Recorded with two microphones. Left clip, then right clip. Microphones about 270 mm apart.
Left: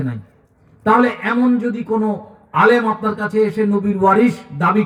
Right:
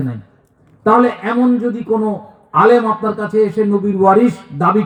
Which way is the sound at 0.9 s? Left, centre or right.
Left.